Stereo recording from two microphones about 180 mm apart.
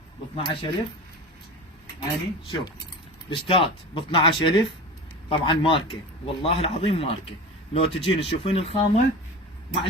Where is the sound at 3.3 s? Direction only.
30° left (ahead or behind).